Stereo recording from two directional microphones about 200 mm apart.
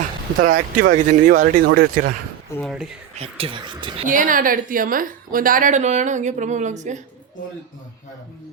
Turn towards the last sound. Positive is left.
turn(degrees=-35)  # may be behind; listen again after turning